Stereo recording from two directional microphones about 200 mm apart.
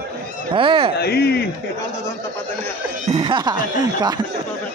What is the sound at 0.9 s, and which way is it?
Speech, 55° left (ahead or behind).